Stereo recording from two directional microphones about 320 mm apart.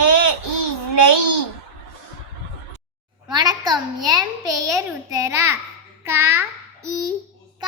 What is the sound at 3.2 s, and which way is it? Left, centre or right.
A child's voice, centre.